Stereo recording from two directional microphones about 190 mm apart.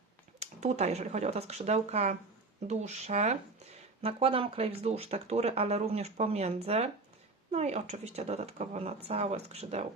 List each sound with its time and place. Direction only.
0.3 s speech: 35° right (ahead or behind)